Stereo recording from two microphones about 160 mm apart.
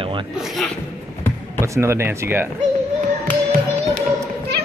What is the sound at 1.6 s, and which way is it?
Speech, 15° right (ahead or behind).